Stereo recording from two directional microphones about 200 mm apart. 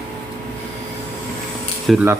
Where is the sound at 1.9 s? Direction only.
Centre (ahead or behind).